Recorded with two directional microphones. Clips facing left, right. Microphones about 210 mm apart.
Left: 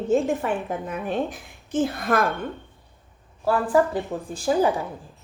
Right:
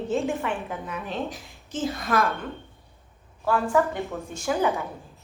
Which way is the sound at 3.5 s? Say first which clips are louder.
Left 2 dB; 35° left (ahead or behind).